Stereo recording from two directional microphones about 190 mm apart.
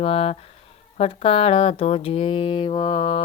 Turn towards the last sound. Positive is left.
turn(degrees=25)  # may be behind; listen again after turning